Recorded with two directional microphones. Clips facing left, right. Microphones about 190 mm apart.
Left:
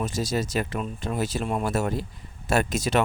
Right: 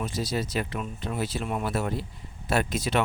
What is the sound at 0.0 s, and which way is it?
Speech, 45° left (ahead or behind).